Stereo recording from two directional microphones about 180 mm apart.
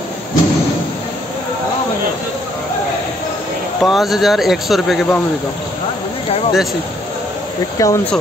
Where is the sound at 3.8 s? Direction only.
Centre (ahead or behind).